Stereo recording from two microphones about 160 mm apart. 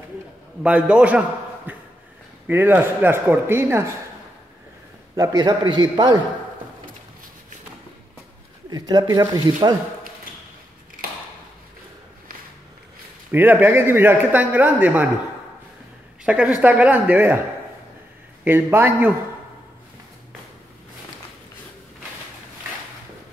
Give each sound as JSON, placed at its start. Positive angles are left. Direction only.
{"t": 0.6, "sound": "a man's voice", "side_deg": -5}
{"t": 1.7, "sound": "a sound", "side_deg": -10}
{"t": 2.4, "sound": "a man's voice", "side_deg": -10}
{"t": 5.1, "sound": "a man's voice", "side_deg": -20}
{"t": 8.6, "sound": "a man's voice", "side_deg": -25}
{"t": 13.3, "sound": "a man's voice", "side_deg": -10}
{"t": 16.3, "sound": "a man's voice", "side_deg": -10}
{"t": 18.4, "sound": "a man's voice", "side_deg": -15}